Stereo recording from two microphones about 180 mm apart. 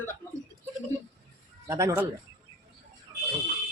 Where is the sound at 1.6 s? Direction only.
15° right (ahead or behind).